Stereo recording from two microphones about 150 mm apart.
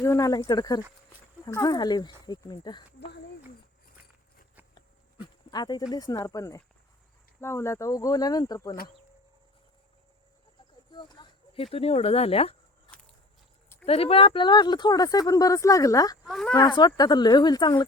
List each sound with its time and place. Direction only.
0.0 s speech: 20° left (ahead or behind)
4.7 s a sound: 30° left (ahead or behind)
5.9 s speech: 25° left (ahead or behind)
10.9 s speech: 30° left (ahead or behind)
13.8 s speech: 40° left (ahead or behind); by 16.1 s 25° left (ahead or behind)
16.2 s speech: centre (ahead or behind)
16.6 s speech: 30° left (ahead or behind)